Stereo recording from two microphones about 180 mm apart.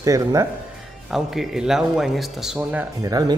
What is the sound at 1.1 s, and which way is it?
Speech, centre (ahead or behind).